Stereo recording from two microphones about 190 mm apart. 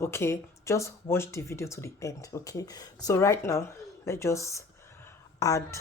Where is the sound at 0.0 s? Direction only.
15° left (ahead or behind).